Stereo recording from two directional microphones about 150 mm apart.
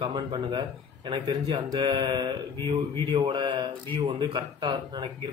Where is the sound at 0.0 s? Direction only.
35° right (ahead or behind).